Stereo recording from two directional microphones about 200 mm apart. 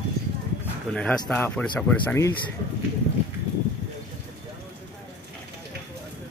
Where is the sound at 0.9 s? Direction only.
5° left (ahead or behind).